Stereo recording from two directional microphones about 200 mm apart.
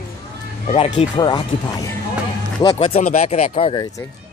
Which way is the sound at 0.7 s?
25° left (ahead or behind).